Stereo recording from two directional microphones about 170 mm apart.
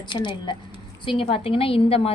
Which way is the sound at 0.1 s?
30° left (ahead or behind).